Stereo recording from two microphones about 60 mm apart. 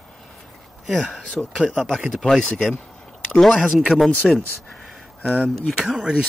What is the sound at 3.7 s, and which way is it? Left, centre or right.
Speech, centre.